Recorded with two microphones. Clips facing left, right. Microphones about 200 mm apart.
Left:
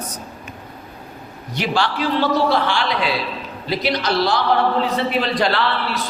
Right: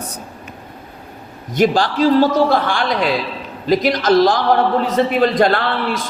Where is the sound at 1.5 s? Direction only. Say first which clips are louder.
Right 6 dB; 45° right (ahead or behind).